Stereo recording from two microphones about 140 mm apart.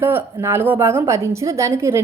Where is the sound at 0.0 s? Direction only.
15° right (ahead or behind).